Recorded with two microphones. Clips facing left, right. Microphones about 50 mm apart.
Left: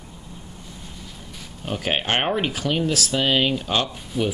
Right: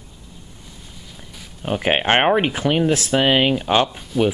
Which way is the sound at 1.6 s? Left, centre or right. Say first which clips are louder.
Right 5 dB; right.